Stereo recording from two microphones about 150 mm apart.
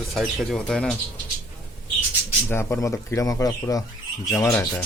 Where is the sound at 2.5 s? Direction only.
15° left (ahead or behind).